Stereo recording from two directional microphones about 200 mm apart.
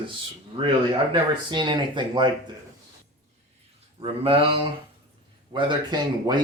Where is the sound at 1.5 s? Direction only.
25° right (ahead or behind).